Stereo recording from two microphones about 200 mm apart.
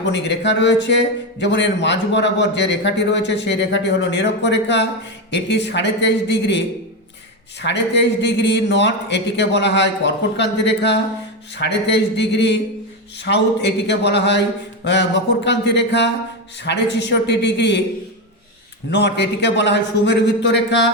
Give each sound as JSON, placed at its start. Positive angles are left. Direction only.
{"t": 0.0, "sound": "a man's voice", "side_deg": 60}
{"t": 7.6, "sound": "a man's voice", "side_deg": 60}
{"t": 18.9, "sound": "a man's voice", "side_deg": 60}